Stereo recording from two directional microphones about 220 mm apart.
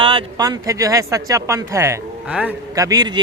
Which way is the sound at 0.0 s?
20° right (ahead or behind).